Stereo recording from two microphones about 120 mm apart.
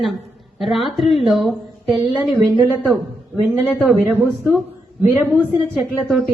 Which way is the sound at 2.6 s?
15° right (ahead or behind).